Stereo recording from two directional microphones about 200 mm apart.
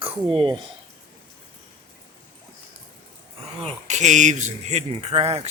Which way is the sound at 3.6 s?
35° right (ahead or behind).